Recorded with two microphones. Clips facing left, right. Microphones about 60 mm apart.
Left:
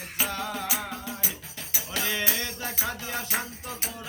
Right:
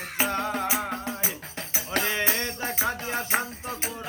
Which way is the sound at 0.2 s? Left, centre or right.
Right.